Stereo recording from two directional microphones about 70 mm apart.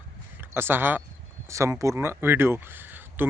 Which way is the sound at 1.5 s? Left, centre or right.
Right.